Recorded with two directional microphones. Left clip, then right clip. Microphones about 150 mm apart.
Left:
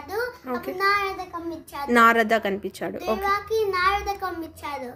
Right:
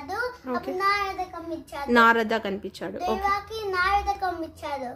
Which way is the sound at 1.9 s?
Centre (ahead or behind).